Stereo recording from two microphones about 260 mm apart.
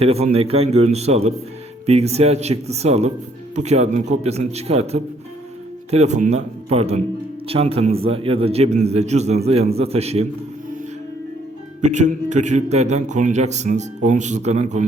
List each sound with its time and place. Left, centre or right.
0.0 s a man's voice: right
11.8 s a man's voice: right